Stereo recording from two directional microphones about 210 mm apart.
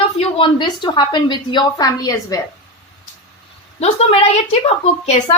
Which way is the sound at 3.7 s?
30° left (ahead or behind).